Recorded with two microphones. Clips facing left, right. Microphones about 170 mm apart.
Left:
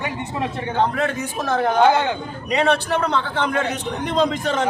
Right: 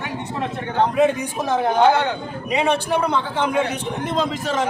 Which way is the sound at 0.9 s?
15° right (ahead or behind).